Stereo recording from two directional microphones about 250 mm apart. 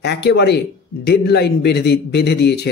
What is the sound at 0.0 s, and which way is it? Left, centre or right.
A man's voice, left.